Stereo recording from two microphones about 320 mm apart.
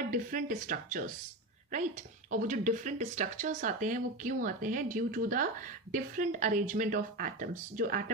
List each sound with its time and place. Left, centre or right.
0.1 s speech: right
2.3 s speech: right